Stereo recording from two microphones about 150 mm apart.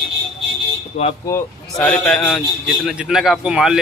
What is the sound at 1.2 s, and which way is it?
Speech, 15° left (ahead or behind).